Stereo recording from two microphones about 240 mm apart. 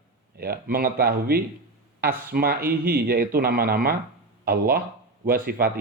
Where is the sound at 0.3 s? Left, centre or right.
Right.